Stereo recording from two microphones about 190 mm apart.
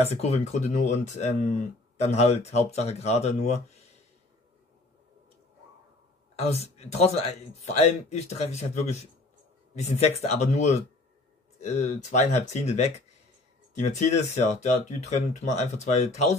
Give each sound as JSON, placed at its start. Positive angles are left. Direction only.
{"t": 0.0, "sound": "speech", "side_deg": 35}
{"t": 6.4, "sound": "speech", "side_deg": 35}